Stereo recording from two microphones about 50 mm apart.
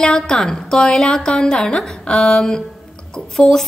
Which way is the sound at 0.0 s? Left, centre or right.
Centre.